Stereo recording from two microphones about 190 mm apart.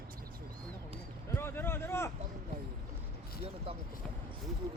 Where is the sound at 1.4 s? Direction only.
10° left (ahead or behind).